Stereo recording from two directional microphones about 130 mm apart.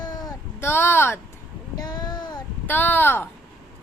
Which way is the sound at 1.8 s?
30° left (ahead or behind).